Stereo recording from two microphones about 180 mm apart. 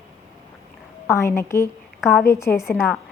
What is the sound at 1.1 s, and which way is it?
A woman's voice, 15° left (ahead or behind).